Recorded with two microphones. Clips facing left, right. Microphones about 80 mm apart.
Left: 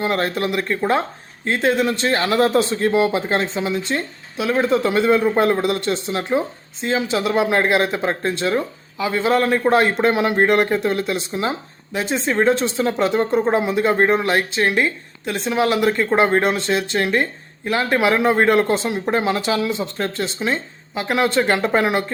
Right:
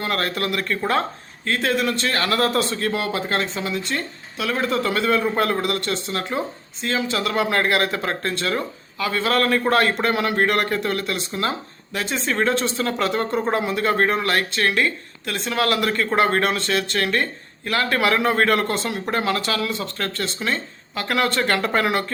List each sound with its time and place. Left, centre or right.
0.0 s speech: left